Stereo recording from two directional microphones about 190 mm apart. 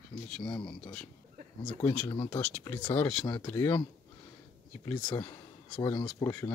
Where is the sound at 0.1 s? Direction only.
50° left (ahead or behind).